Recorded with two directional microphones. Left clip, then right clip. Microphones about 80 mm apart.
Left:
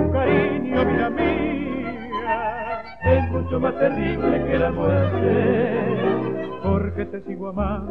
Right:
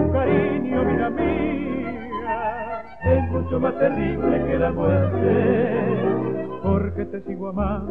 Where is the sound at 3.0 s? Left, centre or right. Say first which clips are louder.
Left 1 dB; right.